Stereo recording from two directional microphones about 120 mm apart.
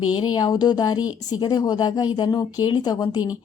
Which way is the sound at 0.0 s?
40° left (ahead or behind).